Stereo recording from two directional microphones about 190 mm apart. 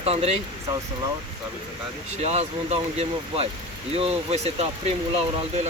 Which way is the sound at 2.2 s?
35° right (ahead or behind).